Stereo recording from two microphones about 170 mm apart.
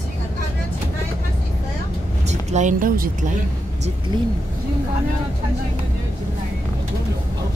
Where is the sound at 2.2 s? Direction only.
45° right (ahead or behind).